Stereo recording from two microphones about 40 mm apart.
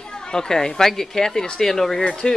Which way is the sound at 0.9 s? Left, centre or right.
Centre.